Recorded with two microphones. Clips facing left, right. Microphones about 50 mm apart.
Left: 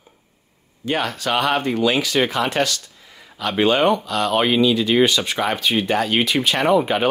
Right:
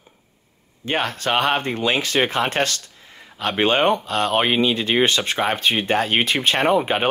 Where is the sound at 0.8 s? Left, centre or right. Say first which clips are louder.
Left 1 dB; right.